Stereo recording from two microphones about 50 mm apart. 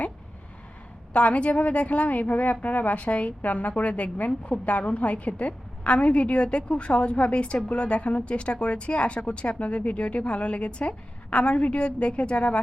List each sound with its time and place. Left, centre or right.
1.1 s a woman's voice: left